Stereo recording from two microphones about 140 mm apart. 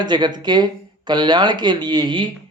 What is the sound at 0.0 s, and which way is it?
Speech, 30° right (ahead or behind).